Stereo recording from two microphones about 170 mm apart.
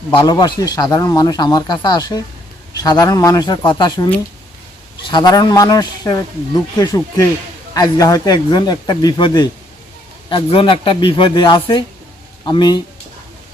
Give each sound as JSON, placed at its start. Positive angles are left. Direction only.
{"t": 0.1, "sound": "speech", "side_deg": 25}
{"t": 5.1, "sound": "speech", "side_deg": 25}